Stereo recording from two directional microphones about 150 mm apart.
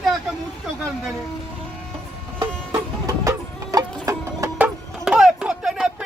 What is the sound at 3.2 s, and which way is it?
Music, 25° right (ahead or behind).